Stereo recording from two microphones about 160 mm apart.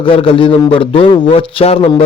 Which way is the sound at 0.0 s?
35° left (ahead or behind).